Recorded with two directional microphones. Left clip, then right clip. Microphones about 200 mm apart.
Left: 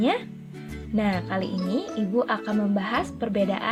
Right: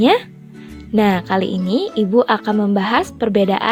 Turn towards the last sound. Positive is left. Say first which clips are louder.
# right 10 dB
turn(degrees=-45)  # may be behind; listen again after turning